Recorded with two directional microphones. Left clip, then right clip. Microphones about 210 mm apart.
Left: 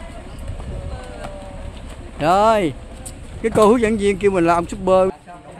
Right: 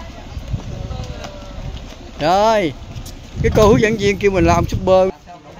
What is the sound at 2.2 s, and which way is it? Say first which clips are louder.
Speech: right 1 dB; 5° left (ahead or behind).